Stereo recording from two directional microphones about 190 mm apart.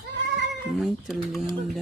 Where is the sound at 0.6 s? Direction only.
Centre (ahead or behind).